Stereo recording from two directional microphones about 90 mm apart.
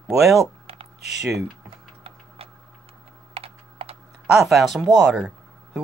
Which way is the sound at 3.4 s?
90° right.